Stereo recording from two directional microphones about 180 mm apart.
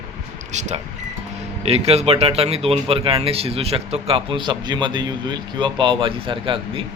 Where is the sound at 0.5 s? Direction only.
40° right (ahead or behind).